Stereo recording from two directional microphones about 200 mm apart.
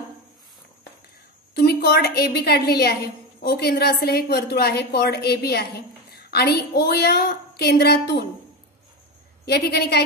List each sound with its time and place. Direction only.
1.5 s a woman's voice: 50° left (ahead or behind)
9.5 s a woman's voice: 55° left (ahead or behind)